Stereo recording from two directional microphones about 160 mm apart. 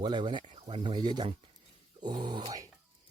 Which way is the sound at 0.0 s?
30° right (ahead or behind).